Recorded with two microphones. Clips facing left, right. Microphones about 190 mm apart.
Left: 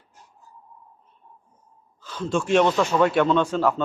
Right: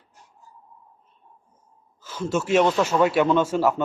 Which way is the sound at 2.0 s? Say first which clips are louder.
Even; 10° right (ahead or behind).